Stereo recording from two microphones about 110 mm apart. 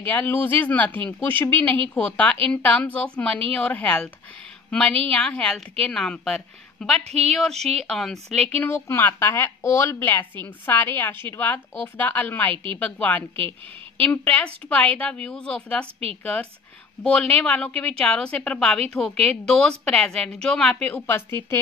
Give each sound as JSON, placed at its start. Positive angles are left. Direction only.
{"t": 0.0, "sound": "a woman's voice", "side_deg": 15}
{"t": 8.6, "sound": "a woman's voice", "side_deg": 25}
{"t": 17.0, "sound": "a woman's voice", "side_deg": 10}
{"t": 20.9, "sound": "a woman's voice", "side_deg": 20}